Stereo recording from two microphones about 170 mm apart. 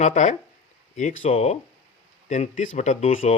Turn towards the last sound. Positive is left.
turn(degrees=50)  # may be behind; listen again after turning